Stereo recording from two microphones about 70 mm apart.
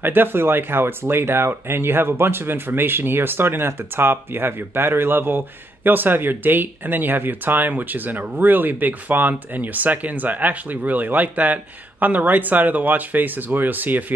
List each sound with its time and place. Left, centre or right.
0.0 s speech: right